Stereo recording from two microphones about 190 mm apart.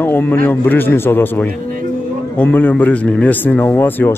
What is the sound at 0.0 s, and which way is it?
A man's voice, 10° left (ahead or behind).